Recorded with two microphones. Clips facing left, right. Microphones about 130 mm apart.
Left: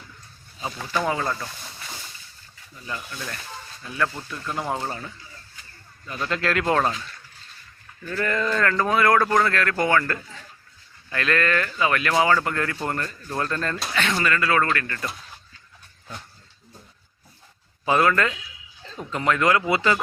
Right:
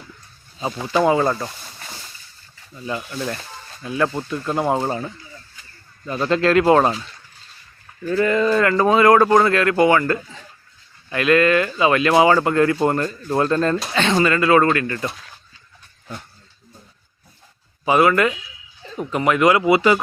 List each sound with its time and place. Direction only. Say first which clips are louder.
0.8 s speech: right 8 dB; 20° right (ahead or behind)
1.2 s speech: right 7 dB; 35° right (ahead or behind)
2.8 s speech: right 8 dB; 25° right (ahead or behind)
8.1 s speech: right 7 dB; 15° right (ahead or behind)
17.8 s speech: right 5 dB; 10° right (ahead or behind)